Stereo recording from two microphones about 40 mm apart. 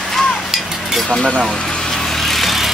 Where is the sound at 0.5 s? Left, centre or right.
Centre.